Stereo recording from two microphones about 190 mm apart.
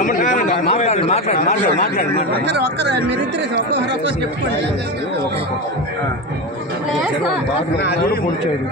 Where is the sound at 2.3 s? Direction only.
60° right (ahead or behind).